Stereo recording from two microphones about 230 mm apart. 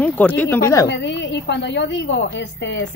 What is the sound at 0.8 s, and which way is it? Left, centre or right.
A woman's voice, left.